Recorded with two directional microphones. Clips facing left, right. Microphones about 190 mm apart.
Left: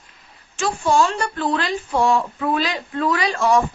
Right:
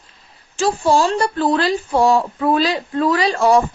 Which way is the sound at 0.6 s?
35° right (ahead or behind).